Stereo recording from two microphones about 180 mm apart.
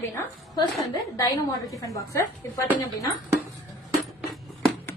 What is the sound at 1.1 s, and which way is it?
A woman's voice, 20° left (ahead or behind).